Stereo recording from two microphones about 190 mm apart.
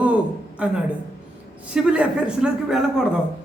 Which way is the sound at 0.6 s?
5° right (ahead or behind).